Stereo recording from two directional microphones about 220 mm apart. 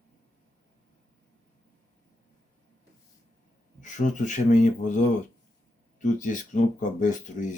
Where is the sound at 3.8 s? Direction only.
35° left (ahead or behind).